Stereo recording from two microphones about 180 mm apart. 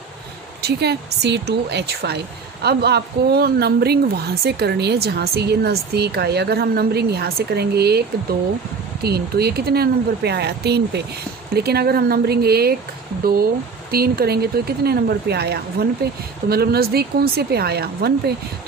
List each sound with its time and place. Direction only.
0.6 s speech: 65° right (ahead or behind)